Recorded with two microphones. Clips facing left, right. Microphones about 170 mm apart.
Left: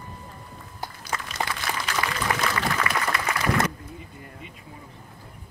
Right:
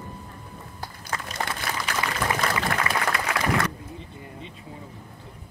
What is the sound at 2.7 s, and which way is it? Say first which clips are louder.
Applause: even; 60° right (ahead or behind).